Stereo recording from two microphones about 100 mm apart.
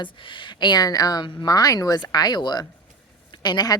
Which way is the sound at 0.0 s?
55° left (ahead or behind).